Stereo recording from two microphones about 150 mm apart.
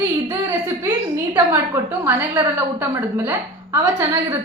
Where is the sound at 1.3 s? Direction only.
15° right (ahead or behind).